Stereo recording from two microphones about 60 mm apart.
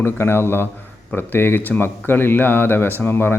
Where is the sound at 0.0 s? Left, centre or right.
Left.